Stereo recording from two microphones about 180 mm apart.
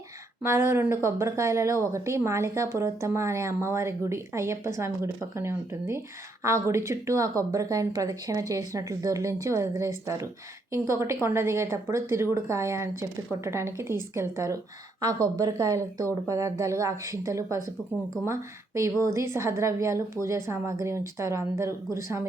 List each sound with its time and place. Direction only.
0.4 s speech: 15° right (ahead or behind)